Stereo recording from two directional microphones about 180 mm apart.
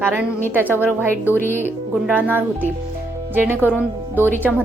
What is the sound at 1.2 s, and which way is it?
Speech, 10° left (ahead or behind).